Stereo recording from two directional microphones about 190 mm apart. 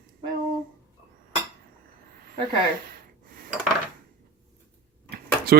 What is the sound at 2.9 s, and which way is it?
Gasp, 50° right (ahead or behind).